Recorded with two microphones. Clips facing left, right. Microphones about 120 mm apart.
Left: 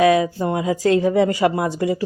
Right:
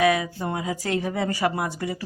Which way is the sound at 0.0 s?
30° left (ahead or behind).